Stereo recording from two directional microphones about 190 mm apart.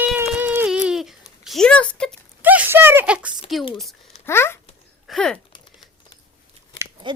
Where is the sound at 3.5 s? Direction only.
Centre (ahead or behind).